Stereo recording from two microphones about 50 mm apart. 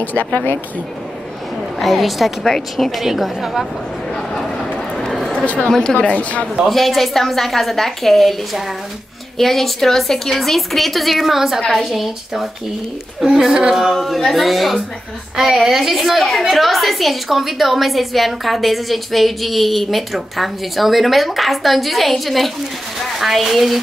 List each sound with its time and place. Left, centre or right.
0.0 s speech: left
1.8 s a woman's voice: centre
4.1 s a sound: centre
5.4 s speech: left
5.7 s speech: centre
6.6 s a woman's voice: centre
13.9 s a woman's voice: centre